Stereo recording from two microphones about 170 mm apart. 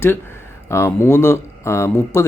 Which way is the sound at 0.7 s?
15° left (ahead or behind).